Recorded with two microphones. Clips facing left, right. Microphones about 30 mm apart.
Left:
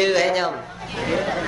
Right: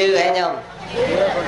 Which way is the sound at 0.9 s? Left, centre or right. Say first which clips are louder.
Right 6 dB; right.